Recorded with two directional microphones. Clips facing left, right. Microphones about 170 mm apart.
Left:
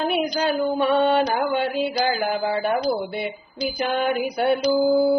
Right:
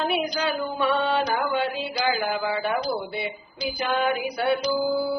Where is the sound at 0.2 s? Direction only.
40° left (ahead or behind).